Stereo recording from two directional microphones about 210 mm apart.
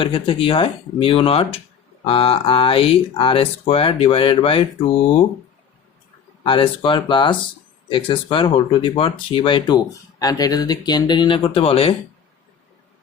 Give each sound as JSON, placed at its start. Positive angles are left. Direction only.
{"t": 0.0, "sound": "speech", "side_deg": 25}
{"t": 6.4, "sound": "speech", "side_deg": 25}